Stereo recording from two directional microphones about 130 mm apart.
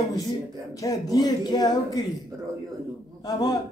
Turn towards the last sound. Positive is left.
turn(degrees=30)  # may be behind; listen again after turning